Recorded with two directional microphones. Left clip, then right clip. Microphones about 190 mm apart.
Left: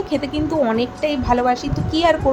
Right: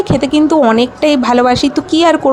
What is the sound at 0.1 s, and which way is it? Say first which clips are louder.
A woman's voice: right 11 dB; 30° right (ahead or behind).